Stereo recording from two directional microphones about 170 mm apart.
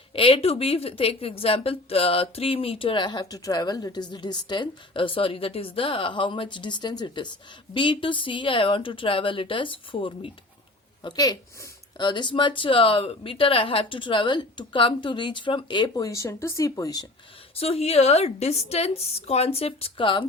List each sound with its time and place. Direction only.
0.1 s a woman's voice: 35° left (ahead or behind)
17.6 s a woman's voice: 35° left (ahead or behind)